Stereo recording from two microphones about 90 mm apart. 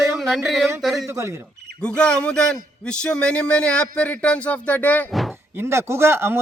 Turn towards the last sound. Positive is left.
turn(degrees=-25)  # may be behind; listen again after turning